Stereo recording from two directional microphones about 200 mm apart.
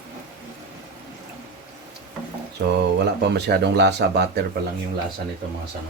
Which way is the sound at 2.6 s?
55° right (ahead or behind).